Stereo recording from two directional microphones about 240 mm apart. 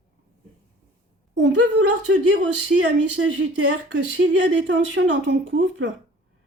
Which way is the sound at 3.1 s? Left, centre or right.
Right.